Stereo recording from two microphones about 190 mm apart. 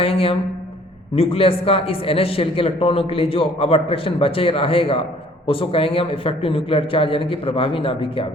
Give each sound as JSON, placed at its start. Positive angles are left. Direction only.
{"t": 0.0, "sound": "a man's voice", "side_deg": 30}